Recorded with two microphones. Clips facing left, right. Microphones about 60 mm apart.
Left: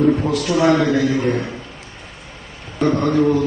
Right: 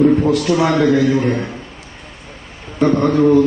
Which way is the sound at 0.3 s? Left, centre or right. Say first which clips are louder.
Right 5 dB; right.